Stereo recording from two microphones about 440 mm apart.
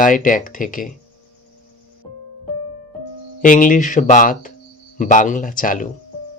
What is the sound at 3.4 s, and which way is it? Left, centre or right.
Speech, centre.